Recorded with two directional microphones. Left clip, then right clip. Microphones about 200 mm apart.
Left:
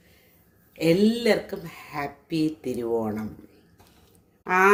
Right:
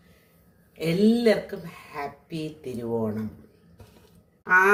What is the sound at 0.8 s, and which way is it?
Speech, 40° left (ahead or behind).